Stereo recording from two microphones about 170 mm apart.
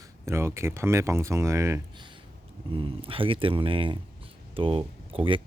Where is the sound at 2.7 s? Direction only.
30° right (ahead or behind).